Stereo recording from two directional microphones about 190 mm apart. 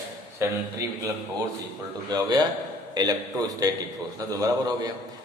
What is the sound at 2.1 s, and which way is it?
A man's voice, 20° right (ahead or behind).